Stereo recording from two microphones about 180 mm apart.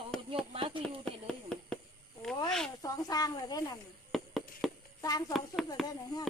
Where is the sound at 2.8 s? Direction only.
20° left (ahead or behind).